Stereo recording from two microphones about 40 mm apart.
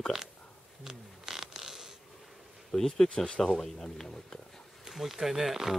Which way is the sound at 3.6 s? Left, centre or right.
Centre.